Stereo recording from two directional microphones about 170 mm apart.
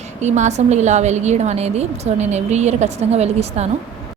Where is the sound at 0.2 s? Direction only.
45° right (ahead or behind).